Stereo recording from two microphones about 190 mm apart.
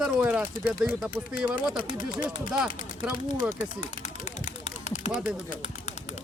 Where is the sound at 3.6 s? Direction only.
40° left (ahead or behind).